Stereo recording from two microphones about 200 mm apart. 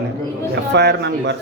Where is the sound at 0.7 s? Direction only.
60° right (ahead or behind).